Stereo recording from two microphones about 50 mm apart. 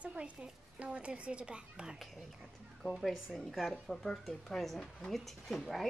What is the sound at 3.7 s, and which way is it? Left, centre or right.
A woman's voice, centre.